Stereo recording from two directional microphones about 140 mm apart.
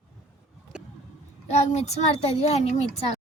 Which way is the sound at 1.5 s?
50° left (ahead or behind).